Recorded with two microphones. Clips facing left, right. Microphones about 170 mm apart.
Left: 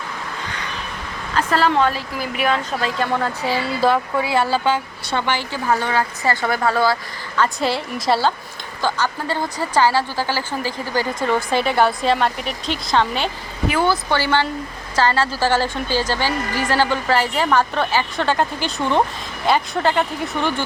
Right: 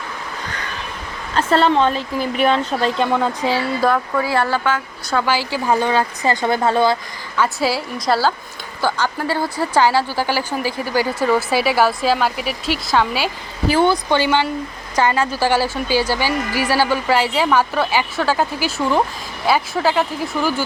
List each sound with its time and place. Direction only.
1.4 s speech: 25° right (ahead or behind)
3.2 s a woman's voice: 10° right (ahead or behind)
3.9 s speech: 10° left (ahead or behind)
5.1 s a woman's voice: 5° right (ahead or behind); by 6.9 s 20° right (ahead or behind)
7.3 s speech: 5° right (ahead or behind)
8.8 s a woman's voice: 10° right (ahead or behind)
13.7 s a woman's voice: 25° right (ahead or behind); by 20.6 s 5° right (ahead or behind)